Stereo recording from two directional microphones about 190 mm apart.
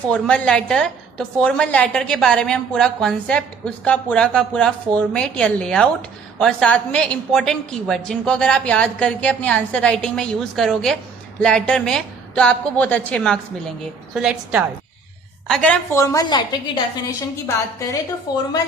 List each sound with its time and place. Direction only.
0.1 s a woman's voice: 5° left (ahead or behind)
16.0 s a woman's voice: 20° left (ahead or behind)